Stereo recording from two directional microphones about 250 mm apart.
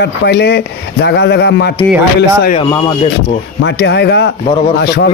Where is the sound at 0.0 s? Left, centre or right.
Left.